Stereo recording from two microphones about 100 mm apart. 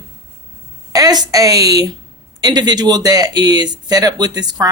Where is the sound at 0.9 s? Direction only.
40° right (ahead or behind).